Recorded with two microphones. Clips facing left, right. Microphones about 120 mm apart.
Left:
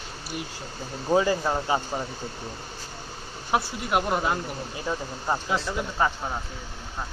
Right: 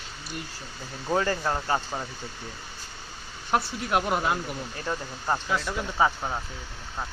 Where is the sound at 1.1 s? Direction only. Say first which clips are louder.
Left 3 dB; 10° left (ahead or behind).